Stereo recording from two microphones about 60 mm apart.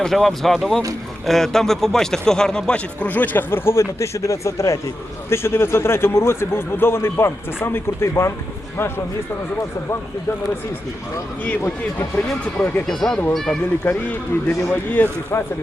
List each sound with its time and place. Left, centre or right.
0.0 s speech: centre; by 4.8 s left
5.3 s a man's voice: left
11.4 s speech: left
12.9 s speech: centre
13.8 s speech: left